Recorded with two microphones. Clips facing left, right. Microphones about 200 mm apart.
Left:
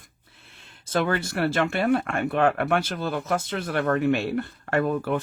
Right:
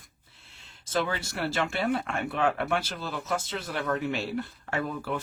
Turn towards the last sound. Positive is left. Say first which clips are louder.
# left 7 dB
turn(degrees=55)  # may be behind; listen again after turning